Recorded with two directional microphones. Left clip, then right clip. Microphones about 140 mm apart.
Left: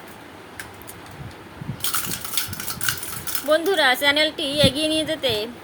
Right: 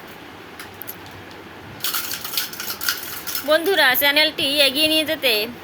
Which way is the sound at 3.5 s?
15° left (ahead or behind).